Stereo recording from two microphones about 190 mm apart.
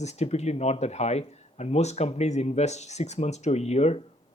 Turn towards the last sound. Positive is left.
turn(degrees=35)  # may be behind; listen again after turning